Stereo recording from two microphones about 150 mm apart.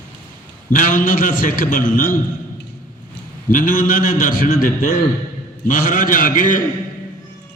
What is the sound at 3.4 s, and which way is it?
A man's voice, 65° left (ahead or behind).